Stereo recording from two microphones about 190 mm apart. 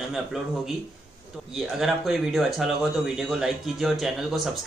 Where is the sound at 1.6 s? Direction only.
Centre (ahead or behind).